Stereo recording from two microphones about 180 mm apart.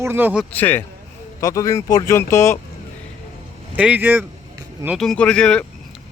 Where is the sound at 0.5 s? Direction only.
10° left (ahead or behind).